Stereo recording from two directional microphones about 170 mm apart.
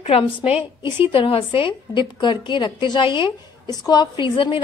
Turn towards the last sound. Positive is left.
turn(degrees=30)  # may be behind; listen again after turning